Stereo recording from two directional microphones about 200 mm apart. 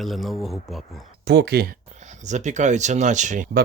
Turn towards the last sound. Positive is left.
turn(degrees=-40)  # may be behind; listen again after turning